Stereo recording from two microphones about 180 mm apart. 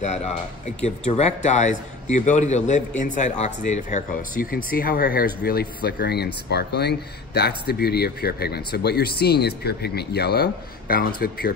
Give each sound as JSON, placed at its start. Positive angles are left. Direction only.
{"t": 0.0, "sound": "a man's voice", "side_deg": 40}